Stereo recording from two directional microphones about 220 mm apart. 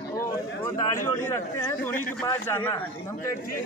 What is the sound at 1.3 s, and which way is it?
Speech, 10° left (ahead or behind).